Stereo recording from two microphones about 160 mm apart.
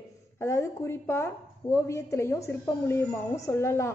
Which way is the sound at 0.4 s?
15° left (ahead or behind).